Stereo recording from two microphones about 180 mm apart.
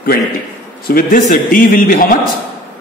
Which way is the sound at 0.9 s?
50° left (ahead or behind).